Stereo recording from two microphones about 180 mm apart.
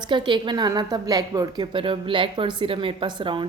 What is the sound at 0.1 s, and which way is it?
A woman's voice, 25° right (ahead or behind).